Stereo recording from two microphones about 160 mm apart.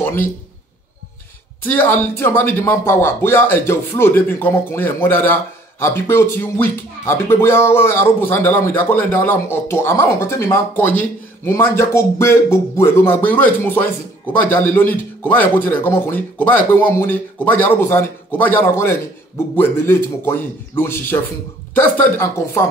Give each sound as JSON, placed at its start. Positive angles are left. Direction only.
{"t": 1.6, "sound": "speech", "side_deg": 15}